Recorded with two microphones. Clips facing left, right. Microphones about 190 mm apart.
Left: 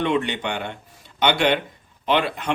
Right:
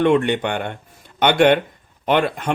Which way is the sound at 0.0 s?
50° right (ahead or behind).